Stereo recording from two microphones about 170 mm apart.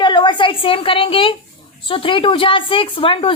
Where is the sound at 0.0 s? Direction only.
25° left (ahead or behind).